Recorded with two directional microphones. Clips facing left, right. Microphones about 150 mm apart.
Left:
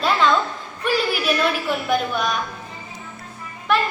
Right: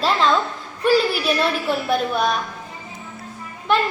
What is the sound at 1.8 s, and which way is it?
Speech, 35° right (ahead or behind).